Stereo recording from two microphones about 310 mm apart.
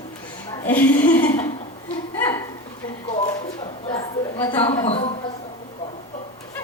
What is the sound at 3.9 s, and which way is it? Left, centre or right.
Speech, centre.